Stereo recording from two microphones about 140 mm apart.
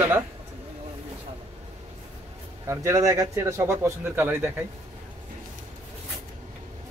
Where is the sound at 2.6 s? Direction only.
20° right (ahead or behind).